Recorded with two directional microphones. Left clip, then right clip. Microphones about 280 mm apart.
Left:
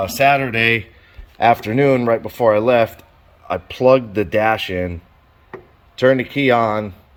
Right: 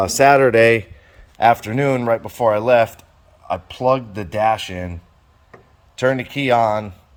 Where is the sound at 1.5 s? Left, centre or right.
Right.